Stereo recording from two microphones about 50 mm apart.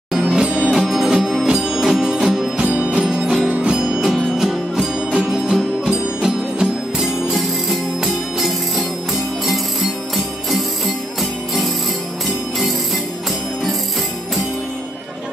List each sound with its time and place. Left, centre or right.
0.1 s music: centre
0.7 s music: centre
7.3 s music: centre